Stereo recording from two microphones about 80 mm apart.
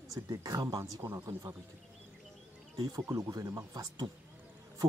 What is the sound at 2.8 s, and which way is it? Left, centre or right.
Speech, right.